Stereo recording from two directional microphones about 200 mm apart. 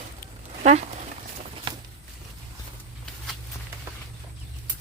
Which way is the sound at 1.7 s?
25° right (ahead or behind).